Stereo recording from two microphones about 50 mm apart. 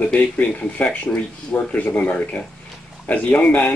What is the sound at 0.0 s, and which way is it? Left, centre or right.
Speech, left.